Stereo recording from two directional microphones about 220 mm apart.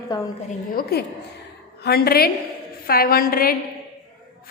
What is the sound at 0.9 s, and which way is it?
A woman's voice, 45° left (ahead or behind).